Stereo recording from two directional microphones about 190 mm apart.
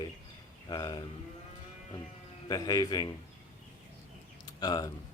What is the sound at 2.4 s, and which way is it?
Speech, 20° left (ahead or behind).